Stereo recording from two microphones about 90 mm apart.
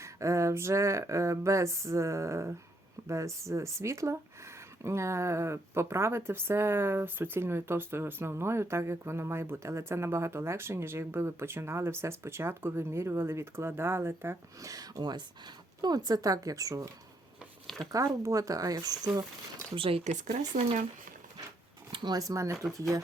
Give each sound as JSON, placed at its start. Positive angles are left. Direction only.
{"t": 0.0, "sound": "a woman's voice", "side_deg": -35}
{"t": 14.7, "sound": "speech", "side_deg": -45}
{"t": 17.9, "sound": "speech", "side_deg": -35}
{"t": 19.7, "sound": "speech", "side_deg": -85}
{"t": 21.9, "sound": "speech", "side_deg": -50}